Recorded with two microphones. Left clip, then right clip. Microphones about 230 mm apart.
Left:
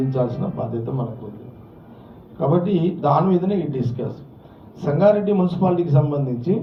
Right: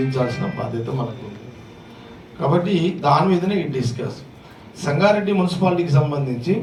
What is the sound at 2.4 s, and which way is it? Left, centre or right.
A man's voice, right.